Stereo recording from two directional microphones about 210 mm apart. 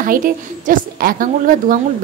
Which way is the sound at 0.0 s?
40° right (ahead or behind).